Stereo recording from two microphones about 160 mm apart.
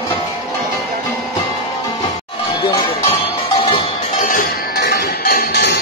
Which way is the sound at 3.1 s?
40° left (ahead or behind).